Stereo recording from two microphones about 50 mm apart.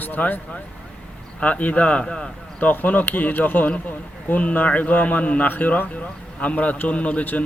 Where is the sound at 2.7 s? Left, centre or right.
Left.